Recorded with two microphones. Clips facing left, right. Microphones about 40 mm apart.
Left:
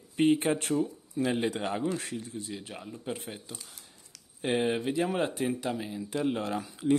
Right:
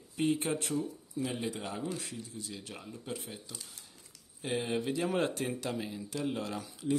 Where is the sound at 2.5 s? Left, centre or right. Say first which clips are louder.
Left 4 dB; left.